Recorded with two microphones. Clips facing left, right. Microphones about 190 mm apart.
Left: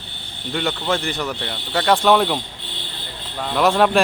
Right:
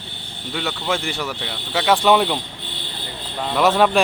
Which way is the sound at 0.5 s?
5° right (ahead or behind).